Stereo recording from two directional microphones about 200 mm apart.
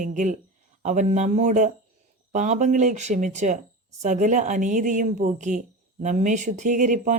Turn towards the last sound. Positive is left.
turn(degrees=-40)  # may be behind; listen again after turning